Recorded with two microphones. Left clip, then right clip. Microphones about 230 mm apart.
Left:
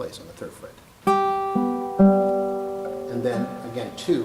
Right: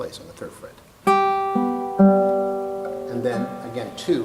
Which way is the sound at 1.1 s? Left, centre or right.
Centre.